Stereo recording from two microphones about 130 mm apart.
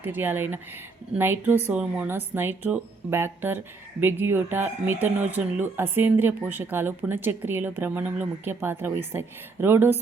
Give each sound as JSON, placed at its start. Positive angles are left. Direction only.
{"t": 0.0, "sound": "speech", "side_deg": -15}